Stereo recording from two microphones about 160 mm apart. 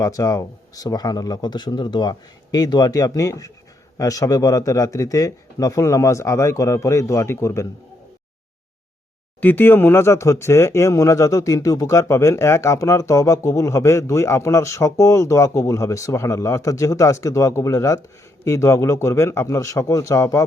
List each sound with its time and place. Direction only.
0.0 s speech: 20° left (ahead or behind)
9.4 s a man's voice: 10° left (ahead or behind)